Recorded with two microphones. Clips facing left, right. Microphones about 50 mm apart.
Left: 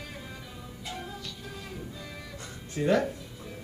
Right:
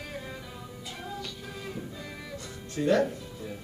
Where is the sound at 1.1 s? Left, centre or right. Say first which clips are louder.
Right 2 dB; centre.